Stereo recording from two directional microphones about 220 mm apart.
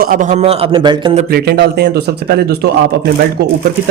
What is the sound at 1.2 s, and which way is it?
A man's voice, 45° right (ahead or behind).